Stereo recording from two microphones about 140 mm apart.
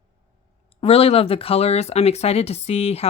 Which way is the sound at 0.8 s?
45° left (ahead or behind).